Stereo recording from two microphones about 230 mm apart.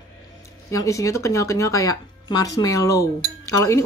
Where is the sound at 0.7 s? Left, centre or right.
Centre.